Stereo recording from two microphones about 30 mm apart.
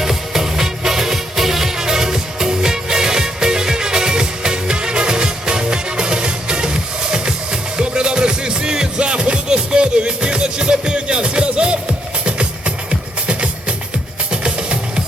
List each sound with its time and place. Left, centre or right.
0.0 s music: centre; by 15.0 s right